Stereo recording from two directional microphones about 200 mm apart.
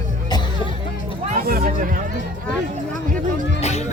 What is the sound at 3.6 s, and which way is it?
Music, 35° left (ahead or behind).